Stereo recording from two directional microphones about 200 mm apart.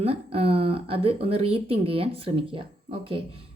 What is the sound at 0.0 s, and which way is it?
A woman's voice, 30° right (ahead or behind).